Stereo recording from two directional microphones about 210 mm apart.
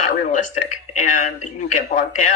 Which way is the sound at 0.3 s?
35° left (ahead or behind).